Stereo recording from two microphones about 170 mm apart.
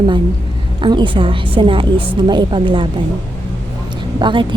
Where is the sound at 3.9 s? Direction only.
25° right (ahead or behind).